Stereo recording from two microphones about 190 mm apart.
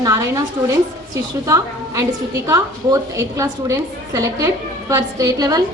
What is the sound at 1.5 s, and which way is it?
A woman's voice, 15° right (ahead or behind).